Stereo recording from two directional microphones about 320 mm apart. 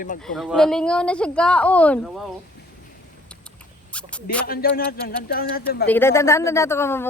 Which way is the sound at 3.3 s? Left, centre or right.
Centre.